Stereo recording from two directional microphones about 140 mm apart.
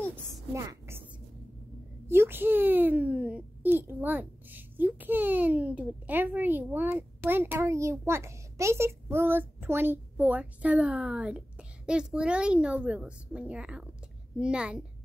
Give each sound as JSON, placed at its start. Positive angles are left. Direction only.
{"t": 0.6, "sound": "a woman's voice", "side_deg": -20}
{"t": 2.0, "sound": "a child's voice", "side_deg": -15}